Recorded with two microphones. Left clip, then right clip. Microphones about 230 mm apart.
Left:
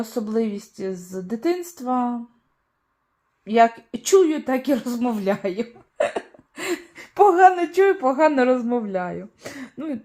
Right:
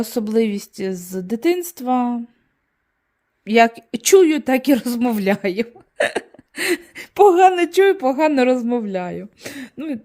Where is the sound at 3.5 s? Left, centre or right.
Right.